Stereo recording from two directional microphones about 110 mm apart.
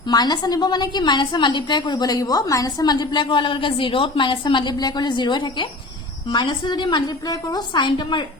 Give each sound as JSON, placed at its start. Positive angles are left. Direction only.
{"t": 0.1, "sound": "a woman's voice", "side_deg": 40}